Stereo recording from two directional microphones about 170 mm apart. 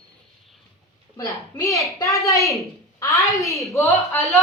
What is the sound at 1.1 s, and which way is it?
A woman's voice, 20° left (ahead or behind).